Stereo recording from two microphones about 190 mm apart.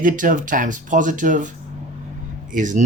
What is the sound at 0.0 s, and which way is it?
Speech, 45° right (ahead or behind).